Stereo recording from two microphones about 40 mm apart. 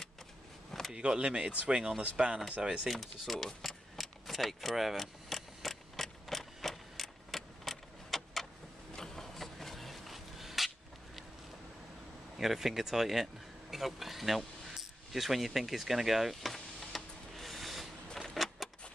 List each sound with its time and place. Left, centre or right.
0.9 s speech: right
2.9 s speech: centre
3.4 s vehicle: centre
8.9 s a sound: centre
12.4 s speech: centre
16.9 s printer: centre
18.3 s vehicle: centre